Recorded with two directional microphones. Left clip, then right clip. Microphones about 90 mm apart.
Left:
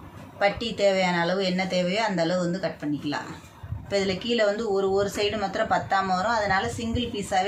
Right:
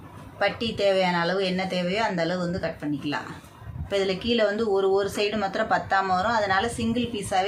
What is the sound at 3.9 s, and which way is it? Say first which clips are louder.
Speech: right 1 dB; 35° right (ahead or behind).